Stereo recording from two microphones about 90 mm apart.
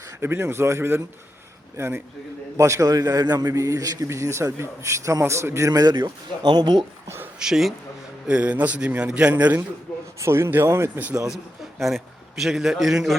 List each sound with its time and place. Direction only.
0.2 s a man's voice: 25° right (ahead or behind); by 6.8 s 55° right (ahead or behind)
7.3 s a man's voice: 5° right (ahead or behind)
10.2 s speech: 30° right (ahead or behind)
11.8 s a man's voice: centre (ahead or behind)